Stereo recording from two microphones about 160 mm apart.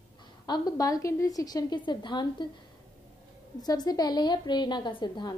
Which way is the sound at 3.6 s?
25° left (ahead or behind).